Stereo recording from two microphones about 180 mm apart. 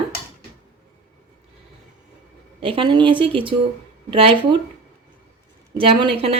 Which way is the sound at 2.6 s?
30° right (ahead or behind).